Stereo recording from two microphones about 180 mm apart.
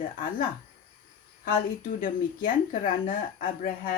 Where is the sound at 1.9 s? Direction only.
50° left (ahead or behind).